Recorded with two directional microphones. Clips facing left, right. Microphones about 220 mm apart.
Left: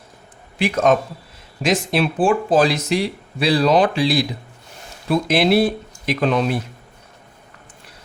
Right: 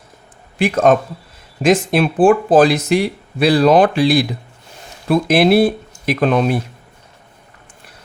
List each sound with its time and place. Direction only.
0.6 s speech: 55° right (ahead or behind)